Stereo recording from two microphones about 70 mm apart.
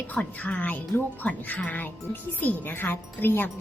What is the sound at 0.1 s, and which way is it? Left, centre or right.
A woman's voice, left.